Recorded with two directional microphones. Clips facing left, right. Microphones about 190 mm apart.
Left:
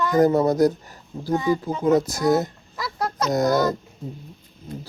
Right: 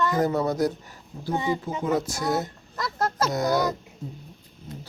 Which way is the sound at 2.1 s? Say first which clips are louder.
Left 6 dB; 40° left (ahead or behind).